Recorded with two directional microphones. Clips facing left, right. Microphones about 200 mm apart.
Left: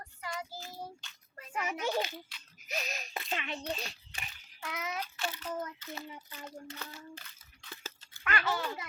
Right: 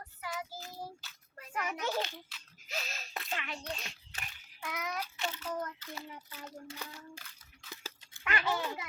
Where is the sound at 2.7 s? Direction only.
15° left (ahead or behind).